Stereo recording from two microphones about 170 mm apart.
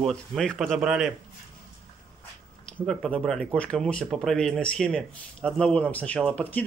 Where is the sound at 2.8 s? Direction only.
Centre (ahead or behind).